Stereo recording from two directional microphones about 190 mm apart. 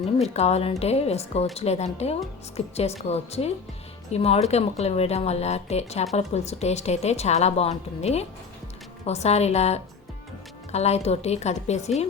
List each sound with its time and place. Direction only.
0.0 s speech: 35° left (ahead or behind)